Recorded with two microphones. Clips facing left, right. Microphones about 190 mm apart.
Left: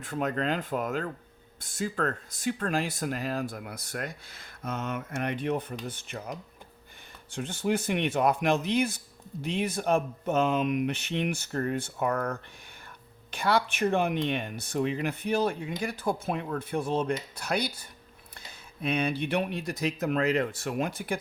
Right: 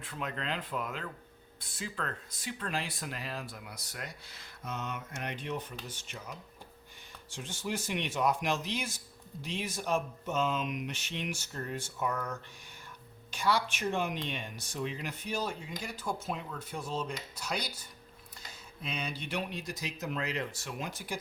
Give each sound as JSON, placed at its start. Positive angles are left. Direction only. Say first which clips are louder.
{"t": 0.0, "sound": "speech", "louder": "left 9 dB", "side_deg": 45}